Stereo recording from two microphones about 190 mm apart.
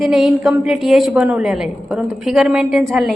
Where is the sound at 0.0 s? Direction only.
Centre (ahead or behind).